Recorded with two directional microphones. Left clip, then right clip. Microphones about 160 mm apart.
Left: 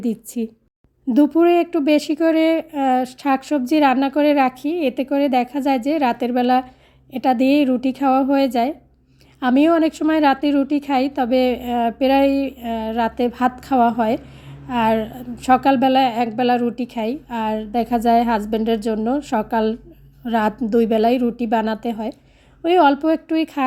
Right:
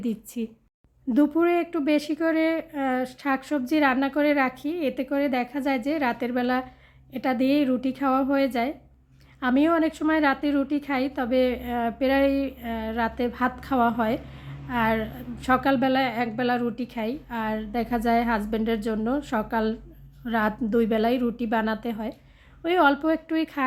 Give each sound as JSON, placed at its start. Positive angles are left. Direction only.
{"t": 0.0, "sound": "a woman's voice", "side_deg": 30}